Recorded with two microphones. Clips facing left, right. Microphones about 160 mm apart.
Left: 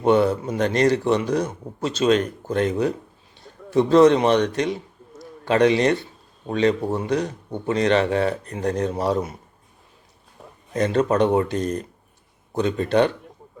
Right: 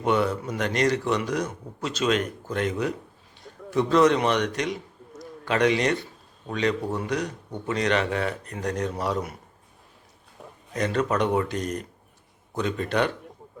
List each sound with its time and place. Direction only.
0.0 s speech: 30° left (ahead or behind)
10.4 s a sound: centre (ahead or behind)
10.8 s speech: 30° left (ahead or behind)